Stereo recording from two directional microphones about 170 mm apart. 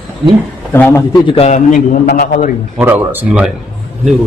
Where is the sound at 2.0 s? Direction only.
75° left (ahead or behind).